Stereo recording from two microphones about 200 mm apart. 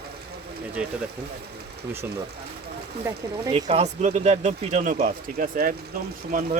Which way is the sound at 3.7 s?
35° right (ahead or behind).